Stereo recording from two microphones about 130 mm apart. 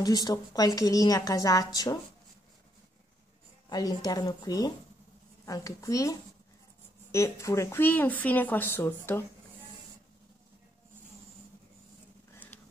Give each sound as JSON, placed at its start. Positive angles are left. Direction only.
{"t": 0.0, "sound": "speech", "side_deg": 30}
{"t": 3.6, "sound": "speech", "side_deg": 30}
{"t": 12.4, "sound": "a sound", "side_deg": 15}